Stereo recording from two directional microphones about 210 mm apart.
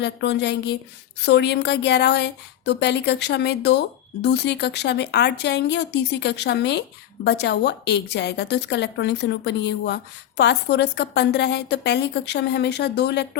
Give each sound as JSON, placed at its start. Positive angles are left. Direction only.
{"t": 0.0, "sound": "a woman's voice", "side_deg": 55}